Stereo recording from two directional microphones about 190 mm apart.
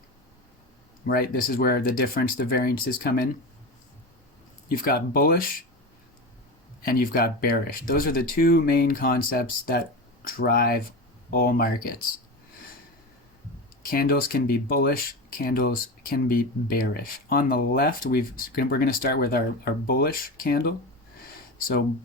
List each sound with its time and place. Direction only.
1.0 s speech: 50° left (ahead or behind)
4.7 s speech: 50° left (ahead or behind)
6.8 s speech: 50° left (ahead or behind)
13.9 s speech: 50° left (ahead or behind)